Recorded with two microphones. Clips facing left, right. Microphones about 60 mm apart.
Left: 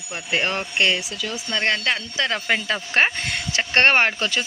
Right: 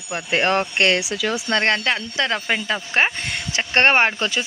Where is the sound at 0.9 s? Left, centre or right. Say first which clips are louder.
Right 5 dB; right.